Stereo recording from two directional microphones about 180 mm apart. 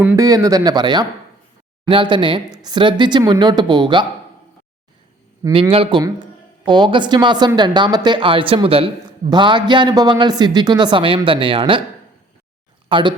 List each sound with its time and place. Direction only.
0.0 s speech: 10° right (ahead or behind)
0.3 s speech: 20° right (ahead or behind)
5.4 s a man's voice: 30° right (ahead or behind)
12.9 s speech: 25° right (ahead or behind)